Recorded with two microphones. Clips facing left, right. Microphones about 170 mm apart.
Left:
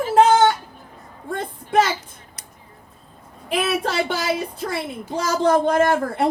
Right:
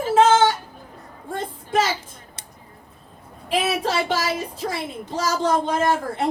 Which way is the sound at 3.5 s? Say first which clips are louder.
Even; 60° left (ahead or behind).